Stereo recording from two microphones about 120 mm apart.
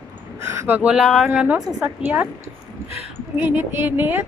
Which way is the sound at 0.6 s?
10° right (ahead or behind).